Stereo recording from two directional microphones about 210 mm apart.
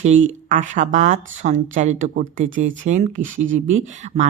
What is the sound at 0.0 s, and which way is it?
Speech, 35° right (ahead or behind).